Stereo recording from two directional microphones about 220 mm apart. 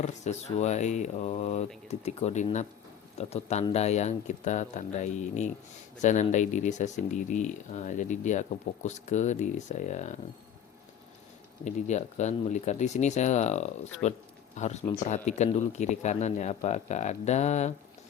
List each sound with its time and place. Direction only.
0.0 s speech: 30° left (ahead or behind)
11.6 s speech: 30° left (ahead or behind)